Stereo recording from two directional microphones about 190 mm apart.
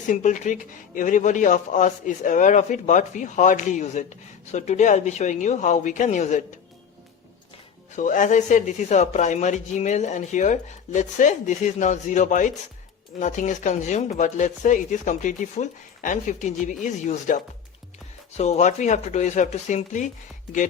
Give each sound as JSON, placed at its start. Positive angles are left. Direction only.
{"t": 0.1, "sound": "speech", "side_deg": 40}
{"t": 7.9, "sound": "speech", "side_deg": 45}